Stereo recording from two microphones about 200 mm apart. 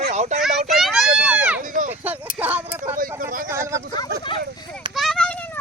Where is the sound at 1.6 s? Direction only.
40° right (ahead or behind).